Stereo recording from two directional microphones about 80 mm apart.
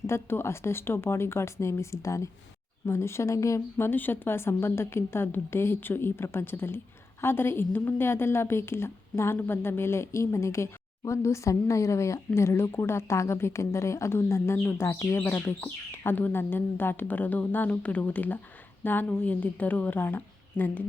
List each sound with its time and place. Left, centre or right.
0.1 s a woman's voice: left
3.8 s a woman's voice: left